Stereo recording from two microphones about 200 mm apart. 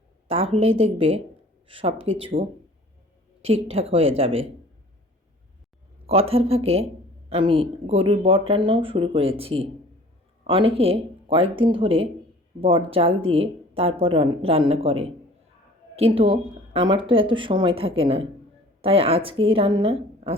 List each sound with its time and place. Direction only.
0.3 s speech: 30° right (ahead or behind)
3.4 s speech: 30° right (ahead or behind)
6.1 s speech: 30° right (ahead or behind)